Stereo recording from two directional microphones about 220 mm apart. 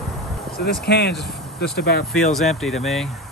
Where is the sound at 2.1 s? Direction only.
Centre (ahead or behind).